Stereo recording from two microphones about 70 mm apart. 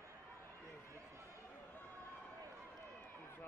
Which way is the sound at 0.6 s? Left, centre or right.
Right.